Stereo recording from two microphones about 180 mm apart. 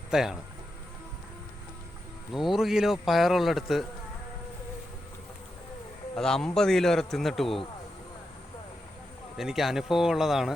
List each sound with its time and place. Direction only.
0.1 s speech: 5° right (ahead or behind)
2.3 s a man's voice: centre (ahead or behind)
6.1 s a man's voice: 5° left (ahead or behind)
9.4 s a man's voice: centre (ahead or behind)